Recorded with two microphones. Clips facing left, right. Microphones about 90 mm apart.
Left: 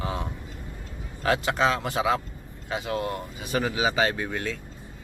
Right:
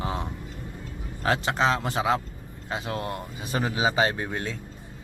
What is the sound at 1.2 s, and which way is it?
Speech, 30° right (ahead or behind).